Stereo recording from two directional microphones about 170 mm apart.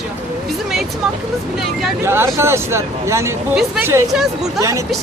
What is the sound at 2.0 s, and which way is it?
A man's voice, 15° right (ahead or behind).